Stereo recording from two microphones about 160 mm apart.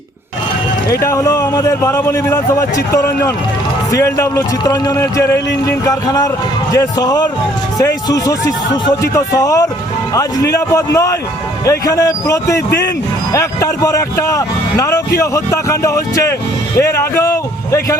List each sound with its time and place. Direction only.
0.9 s speech: 20° left (ahead or behind)